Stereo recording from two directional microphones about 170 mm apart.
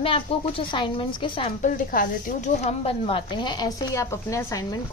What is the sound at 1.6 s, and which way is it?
A woman's voice, 50° left (ahead or behind).